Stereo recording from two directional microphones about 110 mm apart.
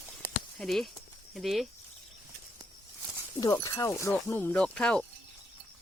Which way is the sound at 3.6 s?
30° left (ahead or behind).